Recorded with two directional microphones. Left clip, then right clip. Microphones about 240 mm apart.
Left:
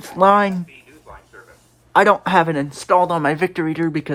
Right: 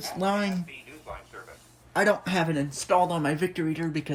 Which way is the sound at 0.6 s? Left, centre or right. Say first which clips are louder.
Right 1 dB; centre.